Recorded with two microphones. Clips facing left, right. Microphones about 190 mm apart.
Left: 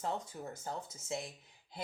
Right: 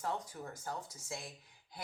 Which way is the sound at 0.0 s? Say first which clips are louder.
Left 1 dB; 25° left (ahead or behind).